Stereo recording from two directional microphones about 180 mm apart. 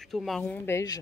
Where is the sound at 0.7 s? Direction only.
15° left (ahead or behind).